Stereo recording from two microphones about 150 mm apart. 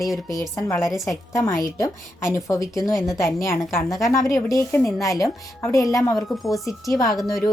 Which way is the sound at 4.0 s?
20° left (ahead or behind).